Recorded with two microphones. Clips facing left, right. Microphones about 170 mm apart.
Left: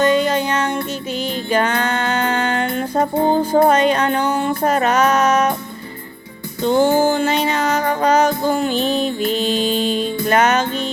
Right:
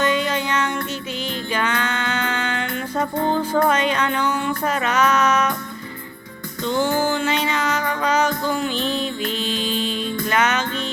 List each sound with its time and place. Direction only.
0.0 s music: 40° left (ahead or behind)
6.7 s music: 45° left (ahead or behind)